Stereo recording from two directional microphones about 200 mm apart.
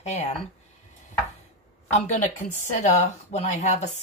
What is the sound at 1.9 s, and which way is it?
Speech, 35° left (ahead or behind).